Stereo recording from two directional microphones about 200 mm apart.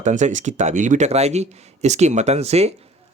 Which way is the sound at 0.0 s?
35° right (ahead or behind).